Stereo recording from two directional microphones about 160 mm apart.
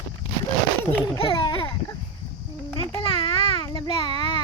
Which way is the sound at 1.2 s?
30° left (ahead or behind).